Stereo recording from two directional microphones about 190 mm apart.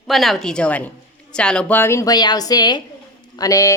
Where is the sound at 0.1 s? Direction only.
Centre (ahead or behind).